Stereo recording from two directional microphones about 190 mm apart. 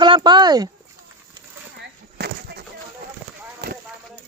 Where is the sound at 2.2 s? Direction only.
60° right (ahead or behind).